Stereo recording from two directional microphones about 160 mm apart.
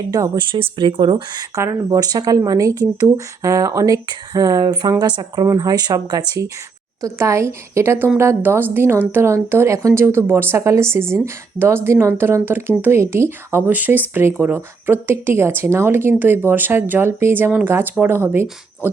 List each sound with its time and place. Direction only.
0.1 s speech: 25° right (ahead or behind)